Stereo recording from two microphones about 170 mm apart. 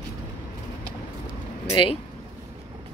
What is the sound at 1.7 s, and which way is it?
Speech, 30° left (ahead or behind).